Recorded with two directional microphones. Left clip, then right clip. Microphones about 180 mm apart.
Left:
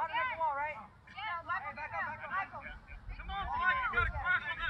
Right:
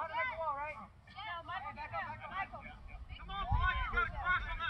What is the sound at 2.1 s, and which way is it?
Vehicle, centre (ahead or behind).